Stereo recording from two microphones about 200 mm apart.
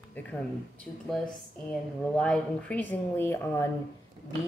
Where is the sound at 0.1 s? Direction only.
5° left (ahead or behind).